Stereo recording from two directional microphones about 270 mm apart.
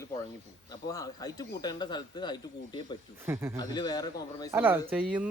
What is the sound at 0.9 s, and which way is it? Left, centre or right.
Speech, centre.